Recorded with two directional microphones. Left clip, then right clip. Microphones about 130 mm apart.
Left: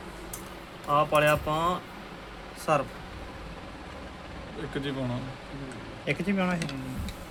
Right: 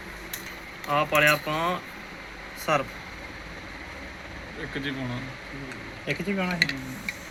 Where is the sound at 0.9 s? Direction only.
15° left (ahead or behind).